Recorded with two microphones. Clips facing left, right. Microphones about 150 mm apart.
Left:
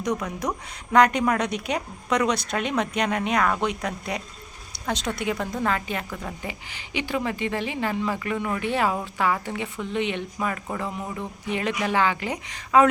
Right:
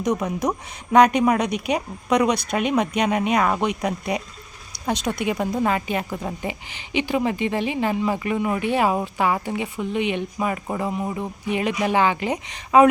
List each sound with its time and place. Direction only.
0.0 s speech: 20° right (ahead or behind)